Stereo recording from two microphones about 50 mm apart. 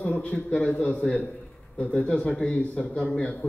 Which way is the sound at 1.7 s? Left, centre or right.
Left.